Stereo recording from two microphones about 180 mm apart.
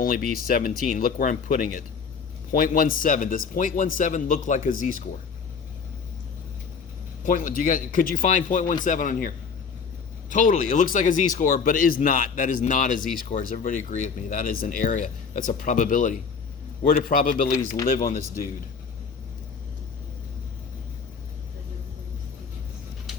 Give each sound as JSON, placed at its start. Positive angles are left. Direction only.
{"t": 0.0, "sound": "speech", "side_deg": 50}
{"t": 7.3, "sound": "speech", "side_deg": 45}